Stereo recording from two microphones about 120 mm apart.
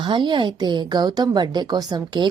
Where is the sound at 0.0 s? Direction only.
40° right (ahead or behind).